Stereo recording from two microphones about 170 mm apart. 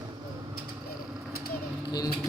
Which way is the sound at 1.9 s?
25° left (ahead or behind).